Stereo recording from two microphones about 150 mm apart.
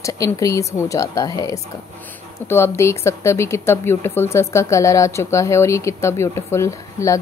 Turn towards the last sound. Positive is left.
turn(degrees=20)  # may be behind; listen again after turning